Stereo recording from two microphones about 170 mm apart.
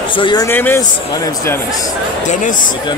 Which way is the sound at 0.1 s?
25° left (ahead or behind).